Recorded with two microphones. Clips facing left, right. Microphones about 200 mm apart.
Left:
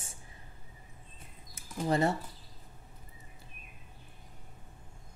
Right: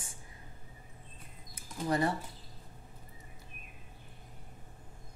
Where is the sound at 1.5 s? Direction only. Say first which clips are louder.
Left 2 dB; 25° left (ahead or behind).